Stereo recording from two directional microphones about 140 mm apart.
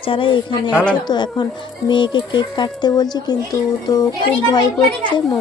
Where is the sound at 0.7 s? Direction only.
10° left (ahead or behind).